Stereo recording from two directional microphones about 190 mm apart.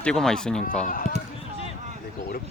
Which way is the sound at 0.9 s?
45° left (ahead or behind).